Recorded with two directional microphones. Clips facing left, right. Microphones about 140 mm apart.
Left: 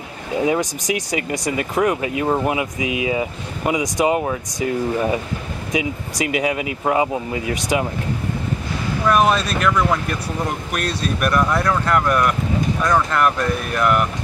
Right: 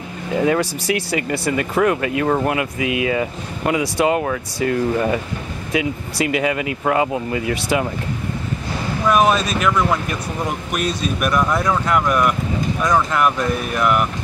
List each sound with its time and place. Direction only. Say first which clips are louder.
0.5 s speech: right 1 dB; 15° left (ahead or behind)
1.6 s speech: right 1 dB; 5° left (ahead or behind)
9.0 s speech: right 1 dB; 5° right (ahead or behind)